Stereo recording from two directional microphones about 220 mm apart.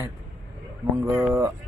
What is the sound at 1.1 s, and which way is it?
Speech, 15° right (ahead or behind).